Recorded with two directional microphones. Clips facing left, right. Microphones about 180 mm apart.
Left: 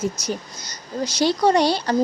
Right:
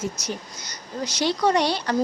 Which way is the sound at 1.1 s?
30° left (ahead or behind).